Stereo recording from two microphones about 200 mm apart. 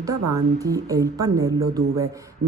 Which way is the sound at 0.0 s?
15° right (ahead or behind).